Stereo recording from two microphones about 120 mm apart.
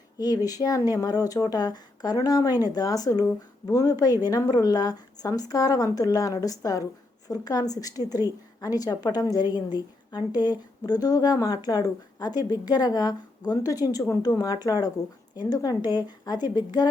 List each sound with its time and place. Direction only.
0.2 s a woman's voice: 35° left (ahead or behind)